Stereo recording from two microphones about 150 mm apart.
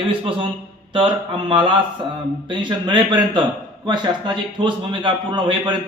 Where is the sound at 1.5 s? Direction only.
35° right (ahead or behind).